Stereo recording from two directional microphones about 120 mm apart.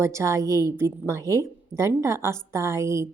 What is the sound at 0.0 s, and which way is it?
A woman's voice, 25° right (ahead or behind).